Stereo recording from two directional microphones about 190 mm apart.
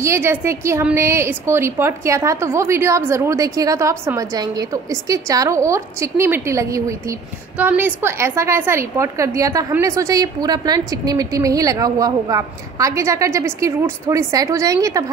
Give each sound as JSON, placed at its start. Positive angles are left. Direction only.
{"t": 0.0, "sound": "a woman's voice", "side_deg": -15}